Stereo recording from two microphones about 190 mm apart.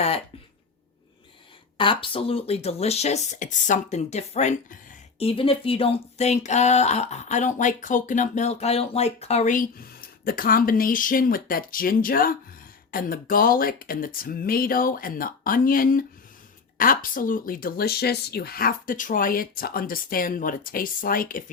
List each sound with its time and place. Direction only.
1.8 s speech: 25° left (ahead or behind)
5.2 s speech: 30° left (ahead or behind); by 21.4 s 50° left (ahead or behind)